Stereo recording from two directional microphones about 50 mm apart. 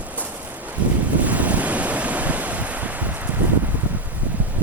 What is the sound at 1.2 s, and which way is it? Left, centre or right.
Waves, right.